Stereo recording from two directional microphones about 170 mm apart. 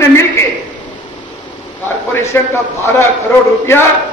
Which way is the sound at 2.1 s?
15° left (ahead or behind).